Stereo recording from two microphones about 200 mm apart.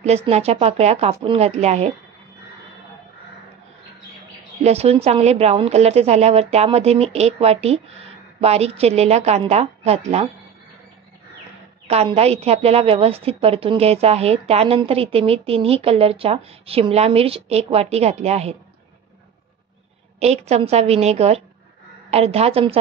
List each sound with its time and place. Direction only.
0.0 s a woman's voice: 30° right (ahead or behind)
4.6 s a woman's voice: 30° right (ahead or behind)
11.9 s a woman's voice: 30° right (ahead or behind)
20.2 s a woman's voice: 30° right (ahead or behind)